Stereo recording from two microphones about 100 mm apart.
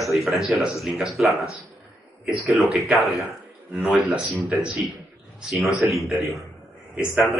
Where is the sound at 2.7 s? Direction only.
Centre (ahead or behind).